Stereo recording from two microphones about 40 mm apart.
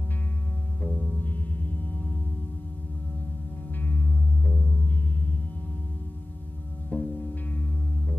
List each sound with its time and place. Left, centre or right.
0.8 s music: left
3.8 s music: left
6.9 s music: left